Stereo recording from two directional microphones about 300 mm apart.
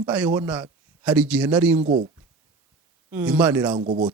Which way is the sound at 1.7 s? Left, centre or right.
Right.